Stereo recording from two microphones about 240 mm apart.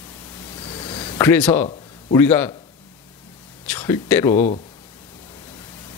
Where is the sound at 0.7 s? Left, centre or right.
Left.